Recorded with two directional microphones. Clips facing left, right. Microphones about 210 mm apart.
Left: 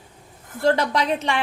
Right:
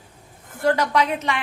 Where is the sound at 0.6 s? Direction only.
30° left (ahead or behind).